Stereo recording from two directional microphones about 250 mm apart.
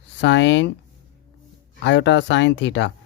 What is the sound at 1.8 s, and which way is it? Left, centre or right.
Speech, left.